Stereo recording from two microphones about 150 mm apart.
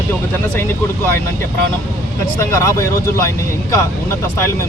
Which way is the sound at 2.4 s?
20° left (ahead or behind).